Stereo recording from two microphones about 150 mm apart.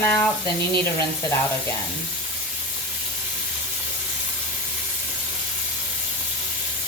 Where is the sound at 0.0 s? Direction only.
15° left (ahead or behind).